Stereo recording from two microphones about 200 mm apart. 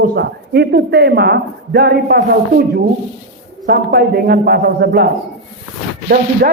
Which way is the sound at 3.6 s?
50° right (ahead or behind).